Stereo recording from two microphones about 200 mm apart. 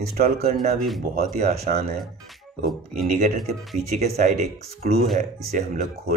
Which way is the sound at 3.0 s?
40° right (ahead or behind).